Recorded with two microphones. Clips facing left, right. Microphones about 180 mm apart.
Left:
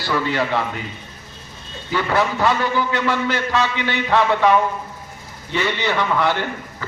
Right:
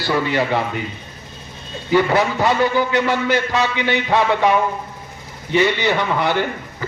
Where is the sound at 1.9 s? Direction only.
15° right (ahead or behind).